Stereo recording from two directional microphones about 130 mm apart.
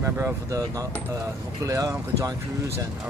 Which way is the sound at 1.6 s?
25° right (ahead or behind).